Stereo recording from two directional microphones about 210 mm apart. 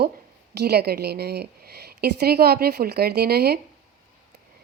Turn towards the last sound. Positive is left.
turn(degrees=-50)  # may be behind; listen again after turning